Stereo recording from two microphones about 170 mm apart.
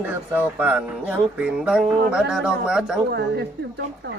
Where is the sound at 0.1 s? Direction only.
10° right (ahead or behind).